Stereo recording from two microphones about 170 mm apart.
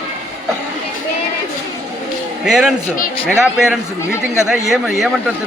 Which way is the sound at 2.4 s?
5° right (ahead or behind).